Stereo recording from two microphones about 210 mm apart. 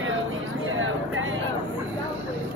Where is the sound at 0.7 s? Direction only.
70° right (ahead or behind).